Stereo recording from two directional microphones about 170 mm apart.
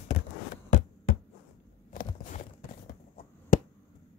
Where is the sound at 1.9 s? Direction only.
45° left (ahead or behind).